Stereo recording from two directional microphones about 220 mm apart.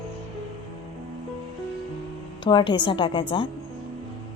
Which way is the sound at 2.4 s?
20° left (ahead or behind).